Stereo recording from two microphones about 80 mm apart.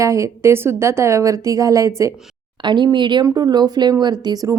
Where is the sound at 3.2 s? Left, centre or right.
Right.